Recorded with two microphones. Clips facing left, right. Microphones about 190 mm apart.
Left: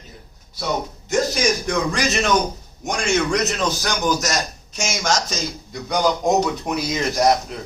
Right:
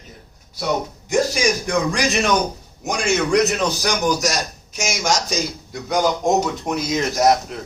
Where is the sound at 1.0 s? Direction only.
10° right (ahead or behind).